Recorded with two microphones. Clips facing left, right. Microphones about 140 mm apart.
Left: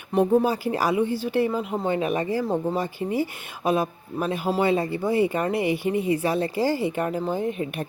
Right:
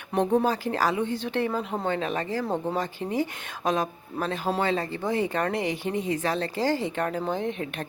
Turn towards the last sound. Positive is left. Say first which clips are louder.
# left 3 dB
turn(degrees=5)  # may be behind; listen again after turning